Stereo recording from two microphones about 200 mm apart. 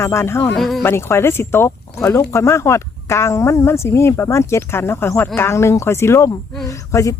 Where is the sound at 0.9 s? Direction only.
10° left (ahead or behind).